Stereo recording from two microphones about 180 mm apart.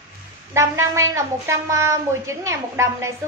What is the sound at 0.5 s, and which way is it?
A woman's voice, 15° right (ahead or behind).